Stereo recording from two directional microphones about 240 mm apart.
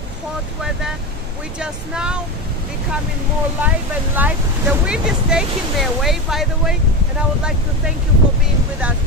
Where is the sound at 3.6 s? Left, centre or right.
Centre.